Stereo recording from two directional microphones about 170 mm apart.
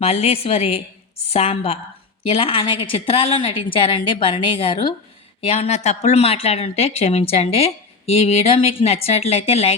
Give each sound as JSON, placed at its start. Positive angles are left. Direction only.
{"t": 0.0, "sound": "speech", "side_deg": 35}